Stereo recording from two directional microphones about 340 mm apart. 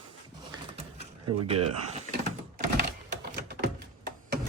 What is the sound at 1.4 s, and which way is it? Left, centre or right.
Power windows, centre.